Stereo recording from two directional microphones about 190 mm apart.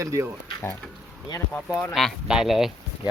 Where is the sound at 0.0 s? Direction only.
15° right (ahead or behind).